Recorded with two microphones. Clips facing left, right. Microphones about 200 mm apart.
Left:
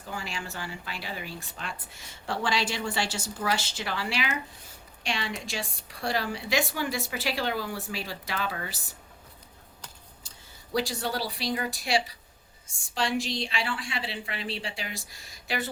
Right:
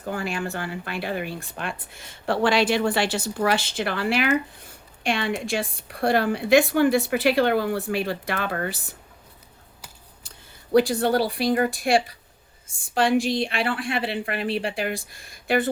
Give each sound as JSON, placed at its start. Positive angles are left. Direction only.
{"t": 0.0, "sound": "speech", "side_deg": -55}
{"t": 10.2, "sound": "speech", "side_deg": -55}